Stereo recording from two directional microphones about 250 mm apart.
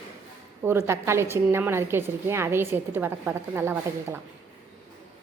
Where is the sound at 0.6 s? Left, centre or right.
Centre.